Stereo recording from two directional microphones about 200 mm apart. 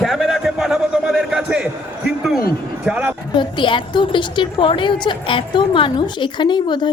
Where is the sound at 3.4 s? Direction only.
25° left (ahead or behind).